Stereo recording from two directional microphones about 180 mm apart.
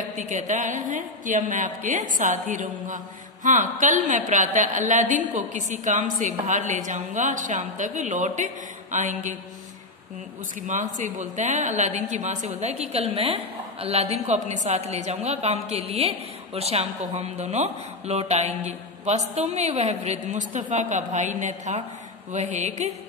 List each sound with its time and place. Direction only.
0.1 s a woman's voice: 40° right (ahead or behind)
10.7 s a woman's voice: 45° right (ahead or behind)